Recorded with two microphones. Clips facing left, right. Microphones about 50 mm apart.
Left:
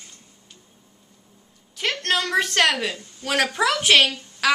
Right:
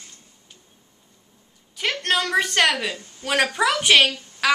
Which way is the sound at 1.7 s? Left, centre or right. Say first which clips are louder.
Right 1 dB; centre.